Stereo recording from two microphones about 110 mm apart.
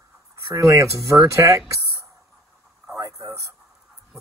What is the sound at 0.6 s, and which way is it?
Speech, 25° right (ahead or behind).